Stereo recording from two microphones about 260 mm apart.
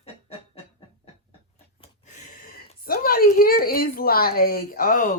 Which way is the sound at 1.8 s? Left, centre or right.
Left.